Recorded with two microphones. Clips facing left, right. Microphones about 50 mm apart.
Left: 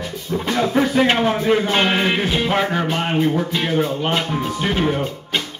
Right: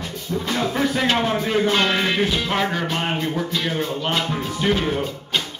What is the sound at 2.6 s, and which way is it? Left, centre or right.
Speech, centre.